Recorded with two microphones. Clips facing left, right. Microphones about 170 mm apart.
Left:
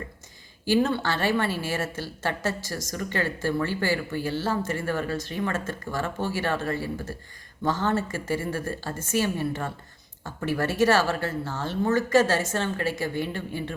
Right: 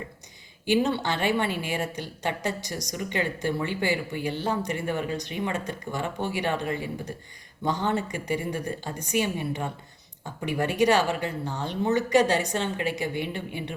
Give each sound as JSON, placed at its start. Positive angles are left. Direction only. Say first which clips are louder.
{"t": 0.6, "sound": "speech", "louder": "left 1 dB", "side_deg": -20}